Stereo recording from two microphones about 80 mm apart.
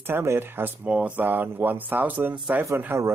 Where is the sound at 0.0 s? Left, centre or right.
Right.